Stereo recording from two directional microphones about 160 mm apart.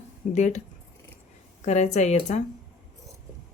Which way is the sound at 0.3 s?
45° left (ahead or behind).